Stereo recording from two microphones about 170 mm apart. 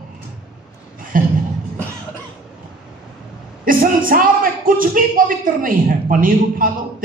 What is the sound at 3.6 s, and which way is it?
A man's voice, 55° right (ahead or behind).